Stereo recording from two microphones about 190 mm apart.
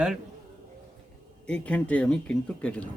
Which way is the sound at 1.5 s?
5° left (ahead or behind).